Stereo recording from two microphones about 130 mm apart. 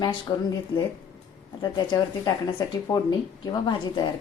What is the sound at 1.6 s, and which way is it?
Speech, 35° left (ahead or behind).